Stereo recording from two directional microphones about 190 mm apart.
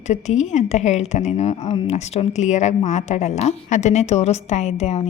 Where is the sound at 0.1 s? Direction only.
40° left (ahead or behind).